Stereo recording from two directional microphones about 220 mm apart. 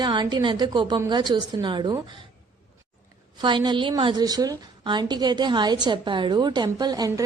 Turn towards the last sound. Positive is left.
turn(degrees=-15)  # may be behind; listen again after turning